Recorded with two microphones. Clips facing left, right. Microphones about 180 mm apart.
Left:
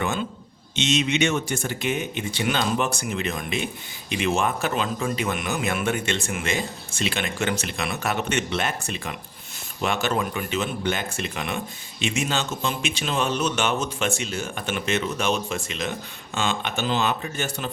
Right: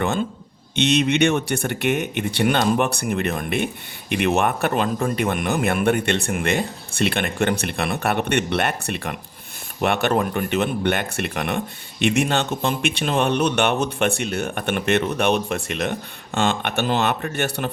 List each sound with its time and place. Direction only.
0.0 s speech: 55° right (ahead or behind)